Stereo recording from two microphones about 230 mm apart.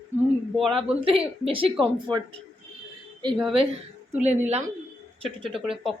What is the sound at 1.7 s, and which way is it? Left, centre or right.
Speech, centre.